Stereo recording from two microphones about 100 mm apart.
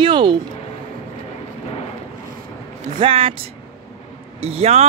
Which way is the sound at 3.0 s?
70° right (ahead or behind).